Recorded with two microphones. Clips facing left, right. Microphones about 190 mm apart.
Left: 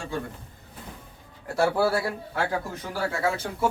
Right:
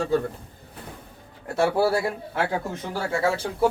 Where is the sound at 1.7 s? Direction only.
20° right (ahead or behind).